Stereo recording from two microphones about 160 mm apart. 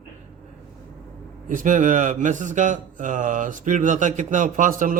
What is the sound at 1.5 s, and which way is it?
Speech, 55° right (ahead or behind).